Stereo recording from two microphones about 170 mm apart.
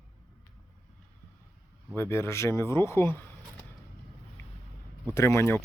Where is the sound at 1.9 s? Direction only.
15° left (ahead or behind).